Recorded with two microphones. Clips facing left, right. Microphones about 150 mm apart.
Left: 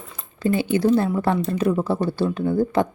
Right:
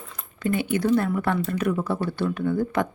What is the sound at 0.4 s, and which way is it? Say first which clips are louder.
Speech: left 4 dB; 30° left (ahead or behind).